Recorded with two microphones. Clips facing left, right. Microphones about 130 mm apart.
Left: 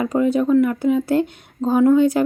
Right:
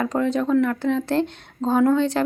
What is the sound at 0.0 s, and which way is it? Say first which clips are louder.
A woman's voice: left 4 dB; 10° left (ahead or behind).